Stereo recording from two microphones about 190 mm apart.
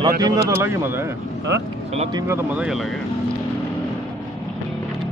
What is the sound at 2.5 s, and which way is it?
Speech, centre (ahead or behind).